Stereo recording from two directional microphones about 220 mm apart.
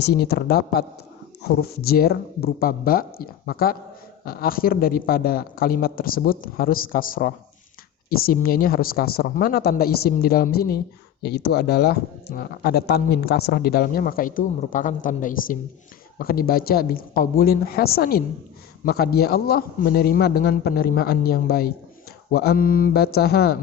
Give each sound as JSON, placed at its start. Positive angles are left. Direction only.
{"t": 0.0, "sound": "speech", "side_deg": 45}